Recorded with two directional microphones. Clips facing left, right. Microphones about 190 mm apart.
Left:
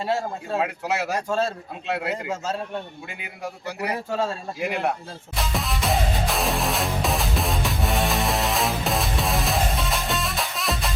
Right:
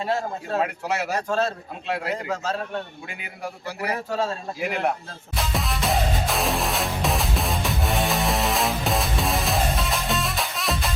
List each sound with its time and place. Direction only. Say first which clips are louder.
0.5 s speech: even; centre (ahead or behind)
3.4 s speech: even; centre (ahead or behind)
5.3 s music: right 1 dB; centre (ahead or behind)